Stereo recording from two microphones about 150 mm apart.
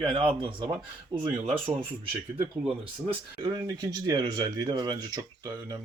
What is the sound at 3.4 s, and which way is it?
Speech, 25° right (ahead or behind).